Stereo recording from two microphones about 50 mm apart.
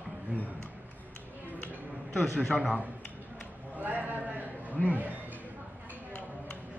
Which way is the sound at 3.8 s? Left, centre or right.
Right.